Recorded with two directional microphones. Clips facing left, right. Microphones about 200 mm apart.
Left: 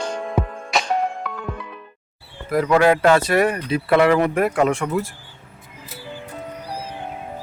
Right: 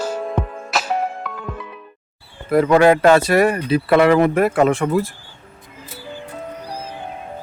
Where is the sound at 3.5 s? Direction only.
35° right (ahead or behind).